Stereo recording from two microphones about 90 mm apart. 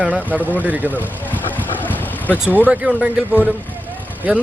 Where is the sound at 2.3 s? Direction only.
15° right (ahead or behind).